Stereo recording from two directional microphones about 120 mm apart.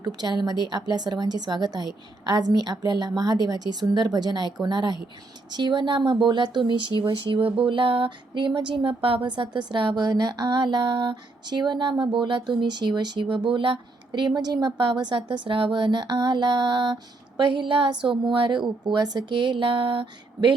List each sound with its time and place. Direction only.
0.0 s speech: 35° right (ahead or behind)